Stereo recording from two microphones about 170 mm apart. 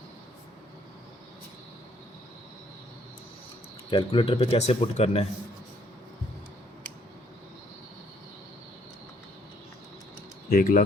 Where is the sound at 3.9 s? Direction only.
35° left (ahead or behind).